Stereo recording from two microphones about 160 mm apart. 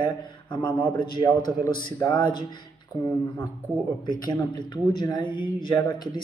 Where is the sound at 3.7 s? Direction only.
10° right (ahead or behind).